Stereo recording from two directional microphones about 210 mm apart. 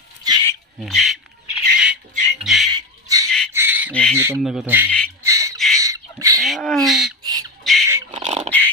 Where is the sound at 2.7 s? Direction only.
15° right (ahead or behind).